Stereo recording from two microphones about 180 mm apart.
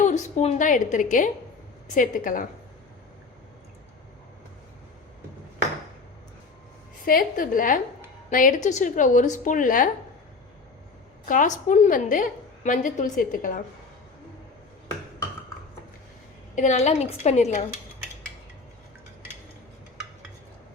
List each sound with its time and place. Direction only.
0.0 s a woman's voice: 40° left (ahead or behind)
7.0 s a woman's voice: 50° left (ahead or behind)
11.3 s a woman's voice: 45° left (ahead or behind)
16.6 s a woman's voice: 40° left (ahead or behind)